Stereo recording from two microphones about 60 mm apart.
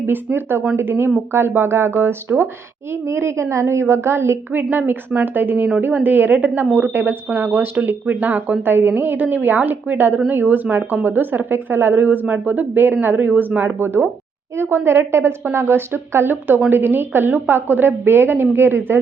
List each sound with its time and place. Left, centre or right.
0.0 s a woman's voice: right